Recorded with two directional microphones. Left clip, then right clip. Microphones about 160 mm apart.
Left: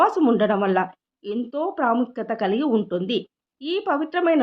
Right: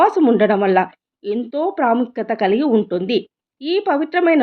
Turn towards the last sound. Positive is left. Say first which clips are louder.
# right 5 dB
turn(degrees=-15)  # may be behind; listen again after turning